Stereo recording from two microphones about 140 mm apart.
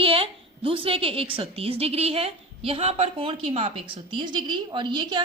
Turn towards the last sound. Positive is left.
turn(degrees=-35)  # may be behind; listen again after turning